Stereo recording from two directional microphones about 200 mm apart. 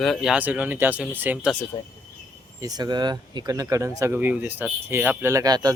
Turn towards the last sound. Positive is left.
turn(degrees=-20)  # may be behind; listen again after turning